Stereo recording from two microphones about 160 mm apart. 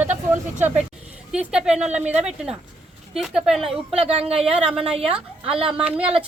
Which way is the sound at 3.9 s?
40° right (ahead or behind).